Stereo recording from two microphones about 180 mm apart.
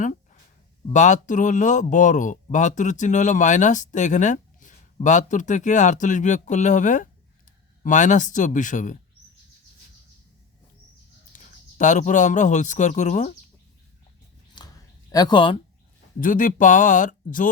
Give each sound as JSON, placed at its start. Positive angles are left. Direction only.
{"t": 0.0, "sound": "a sound", "side_deg": 45}
{"t": 0.9, "sound": "speech", "side_deg": 40}
{"t": 11.3, "sound": "speech", "side_deg": 45}
{"t": 14.6, "sound": "a sound", "side_deg": 25}
{"t": 15.1, "sound": "speech", "side_deg": 25}
{"t": 16.2, "sound": "speech", "side_deg": 50}